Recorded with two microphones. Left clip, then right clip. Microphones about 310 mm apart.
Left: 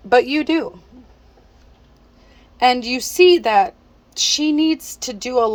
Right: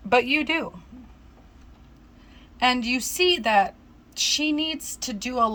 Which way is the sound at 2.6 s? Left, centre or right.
Centre.